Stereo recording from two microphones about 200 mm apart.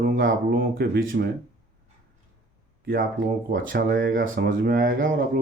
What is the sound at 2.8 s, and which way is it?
Speech, 45° right (ahead or behind).